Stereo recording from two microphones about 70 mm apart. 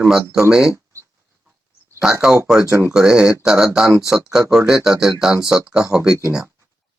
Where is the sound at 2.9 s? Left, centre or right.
Centre.